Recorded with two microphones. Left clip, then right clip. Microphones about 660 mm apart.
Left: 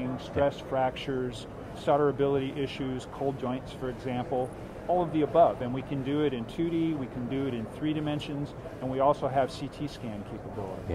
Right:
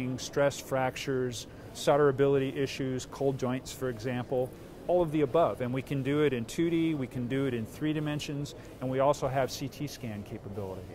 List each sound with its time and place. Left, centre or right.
0.4 s speech: right